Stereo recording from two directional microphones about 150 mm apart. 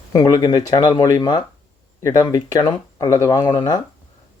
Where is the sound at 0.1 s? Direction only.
25° left (ahead or behind).